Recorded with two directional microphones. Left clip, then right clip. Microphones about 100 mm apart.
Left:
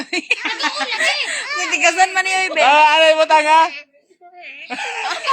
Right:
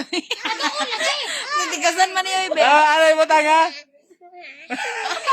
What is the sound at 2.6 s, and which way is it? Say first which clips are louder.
Speech: left 3 dB; 50° right (ahead or behind).